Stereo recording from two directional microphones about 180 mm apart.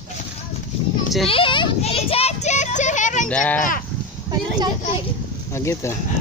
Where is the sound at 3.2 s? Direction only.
5° left (ahead or behind).